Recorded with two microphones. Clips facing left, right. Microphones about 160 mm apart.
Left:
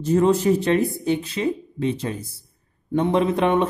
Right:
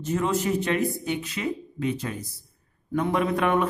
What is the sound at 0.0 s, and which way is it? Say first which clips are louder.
Speech: left 7 dB; 35° left (ahead or behind).